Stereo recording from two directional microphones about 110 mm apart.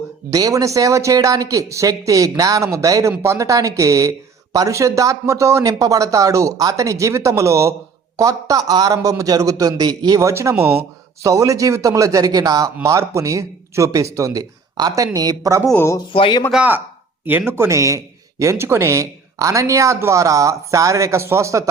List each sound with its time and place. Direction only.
0.3 s speech: 30° right (ahead or behind)
15.7 s speech: 20° left (ahead or behind)
16.1 s speech: 55° left (ahead or behind)
17.2 s speech: 20° right (ahead or behind)